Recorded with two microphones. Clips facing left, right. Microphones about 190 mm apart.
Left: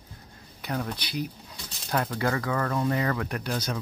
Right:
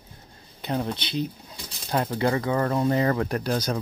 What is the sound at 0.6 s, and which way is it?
Speech, 25° right (ahead or behind).